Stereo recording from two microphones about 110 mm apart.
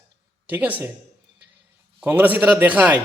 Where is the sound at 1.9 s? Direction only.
15° right (ahead or behind).